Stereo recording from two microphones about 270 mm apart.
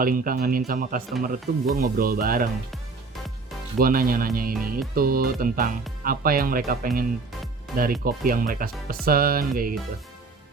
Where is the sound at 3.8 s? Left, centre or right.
Right.